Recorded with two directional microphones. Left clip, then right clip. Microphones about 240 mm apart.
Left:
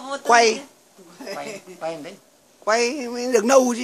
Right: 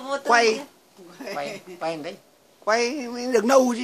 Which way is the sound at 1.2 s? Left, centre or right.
Right.